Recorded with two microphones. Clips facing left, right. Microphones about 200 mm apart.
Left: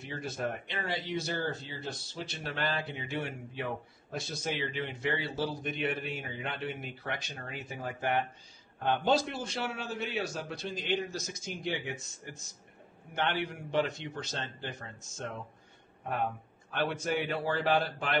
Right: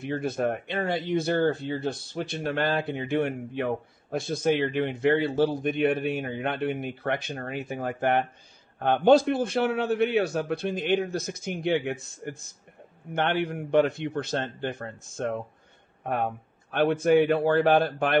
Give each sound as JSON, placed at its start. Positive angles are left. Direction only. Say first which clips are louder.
{"t": 0.0, "sound": "speech", "louder": "right 9 dB", "side_deg": -55}
{"t": 16.7, "sound": "speech", "louder": "right 11 dB", "side_deg": -55}